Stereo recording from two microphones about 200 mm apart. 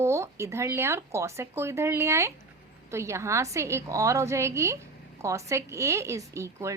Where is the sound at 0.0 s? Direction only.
15° right (ahead or behind).